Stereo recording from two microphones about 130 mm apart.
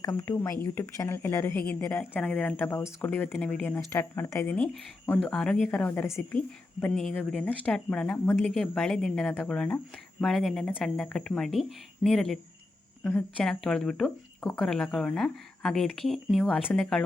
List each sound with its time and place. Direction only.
0.1 s speech: 15° left (ahead or behind)
6.9 s speech: 5° left (ahead or behind)